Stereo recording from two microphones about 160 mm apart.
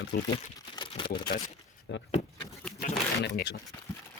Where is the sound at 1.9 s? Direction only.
90° left.